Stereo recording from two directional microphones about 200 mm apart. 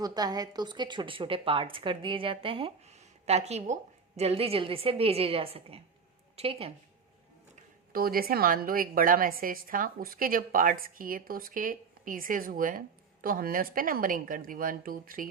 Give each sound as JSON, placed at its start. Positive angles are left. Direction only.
{"t": 0.0, "sound": "a woman's voice", "side_deg": -20}
{"t": 7.9, "sound": "a woman's voice", "side_deg": -45}